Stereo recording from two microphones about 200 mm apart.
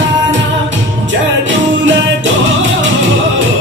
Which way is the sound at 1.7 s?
70° right (ahead or behind).